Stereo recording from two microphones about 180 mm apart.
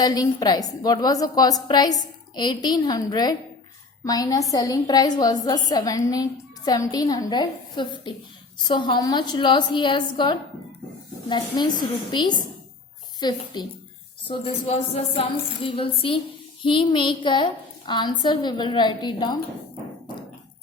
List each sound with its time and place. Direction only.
0.0 s a woman's voice: 20° left (ahead or behind)